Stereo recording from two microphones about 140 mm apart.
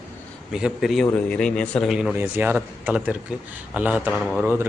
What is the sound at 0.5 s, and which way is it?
Speech, 5° right (ahead or behind).